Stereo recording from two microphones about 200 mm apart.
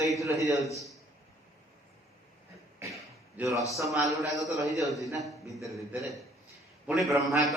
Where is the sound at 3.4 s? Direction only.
10° right (ahead or behind).